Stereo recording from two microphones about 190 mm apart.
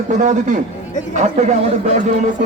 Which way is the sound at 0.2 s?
40° right (ahead or behind).